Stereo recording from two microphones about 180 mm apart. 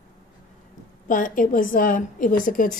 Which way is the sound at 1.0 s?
45° left (ahead or behind).